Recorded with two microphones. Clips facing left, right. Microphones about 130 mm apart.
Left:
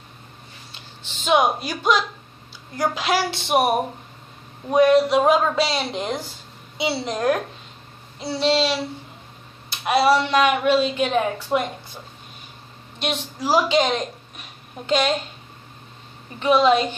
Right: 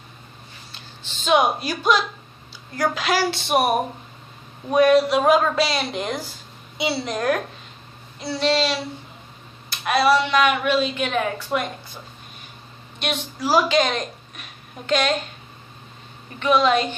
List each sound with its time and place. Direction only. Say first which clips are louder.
0.7 s speech: even; 20° left (ahead or behind)
13.0 s a woman's voice: even; 25° left (ahead or behind)
16.3 s speech: left 2 dB; 30° left (ahead or behind)